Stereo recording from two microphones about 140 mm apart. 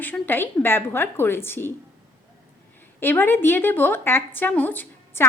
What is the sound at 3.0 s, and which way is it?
A woman's voice, 15° left (ahead or behind).